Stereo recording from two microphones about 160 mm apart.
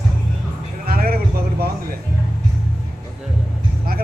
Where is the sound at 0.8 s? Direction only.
70° right (ahead or behind).